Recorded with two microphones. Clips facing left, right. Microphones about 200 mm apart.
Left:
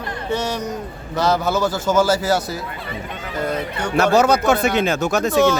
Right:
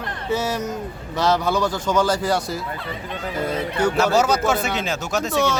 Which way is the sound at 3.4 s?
10° right (ahead or behind).